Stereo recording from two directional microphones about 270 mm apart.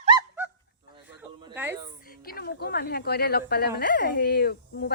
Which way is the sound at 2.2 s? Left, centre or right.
Left.